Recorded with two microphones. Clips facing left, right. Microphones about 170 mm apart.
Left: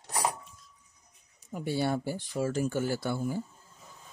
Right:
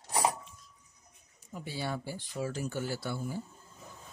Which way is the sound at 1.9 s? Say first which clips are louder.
Left 6 dB; 45° left (ahead or behind).